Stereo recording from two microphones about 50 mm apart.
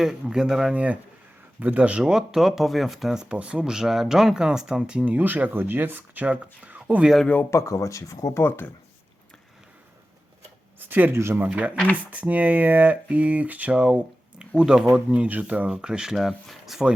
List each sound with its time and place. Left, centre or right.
0.0 s speech: centre
0.7 s speech: right; by 3.2 s centre
3.3 s speech: right
3.6 s speech: centre
5.0 s speech: right
6.7 s a sound: right
7.5 s speech: left
8.4 s speech: left
10.8 s speech: right
11.1 s speech: right
11.5 s speech: right
14.3 s speech: centre
15.7 s speech: centre